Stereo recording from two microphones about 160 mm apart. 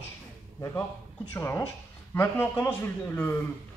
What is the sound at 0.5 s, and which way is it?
Speech, 15° left (ahead or behind).